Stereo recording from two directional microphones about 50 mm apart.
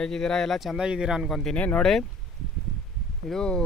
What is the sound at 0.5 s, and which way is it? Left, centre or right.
Speech, centre.